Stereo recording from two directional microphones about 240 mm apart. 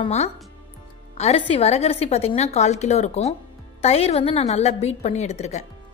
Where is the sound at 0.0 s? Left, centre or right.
Left.